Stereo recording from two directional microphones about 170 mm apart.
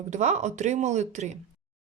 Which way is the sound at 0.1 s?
40° right (ahead or behind).